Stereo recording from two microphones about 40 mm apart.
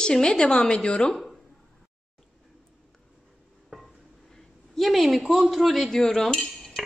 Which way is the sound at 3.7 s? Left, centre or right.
Centre.